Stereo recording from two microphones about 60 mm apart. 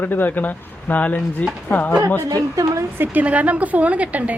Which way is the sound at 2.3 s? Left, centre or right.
Right.